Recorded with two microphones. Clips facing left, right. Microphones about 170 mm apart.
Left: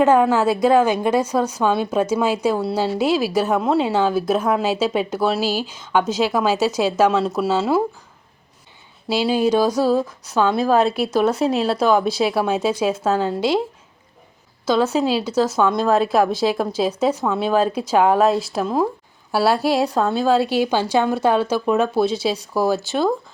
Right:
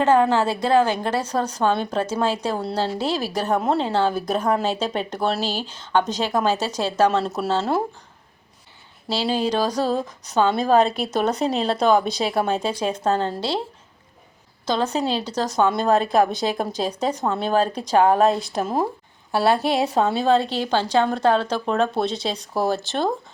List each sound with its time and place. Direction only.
0.0 s a woman's voice: 10° left (ahead or behind)
9.0 s a woman's voice: 10° left (ahead or behind)
14.6 s a woman's voice: 5° left (ahead or behind)